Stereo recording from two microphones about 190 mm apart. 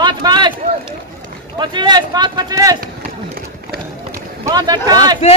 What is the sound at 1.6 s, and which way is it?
Speech, 25° right (ahead or behind).